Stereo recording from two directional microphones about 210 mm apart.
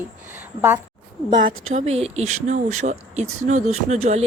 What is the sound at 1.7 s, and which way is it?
Speech, 30° right (ahead or behind).